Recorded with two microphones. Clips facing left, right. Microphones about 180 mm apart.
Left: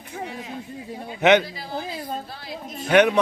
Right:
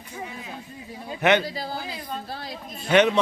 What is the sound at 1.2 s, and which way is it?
Speech, 15° left (ahead or behind).